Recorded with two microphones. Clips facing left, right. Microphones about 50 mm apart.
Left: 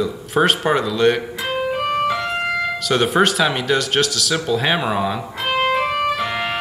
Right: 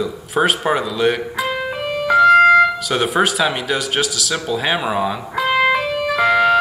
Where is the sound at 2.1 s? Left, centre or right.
Right.